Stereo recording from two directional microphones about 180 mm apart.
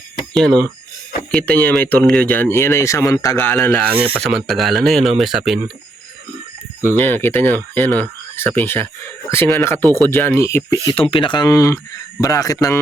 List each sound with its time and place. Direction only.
0.3 s speech: 5° left (ahead or behind)
3.9 s speech: 30° right (ahead or behind)
4.2 s speech: centre (ahead or behind)
6.8 s speech: 10° left (ahead or behind)
9.8 s speech: 20° right (ahead or behind)
10.1 s a man's voice: 10° left (ahead or behind)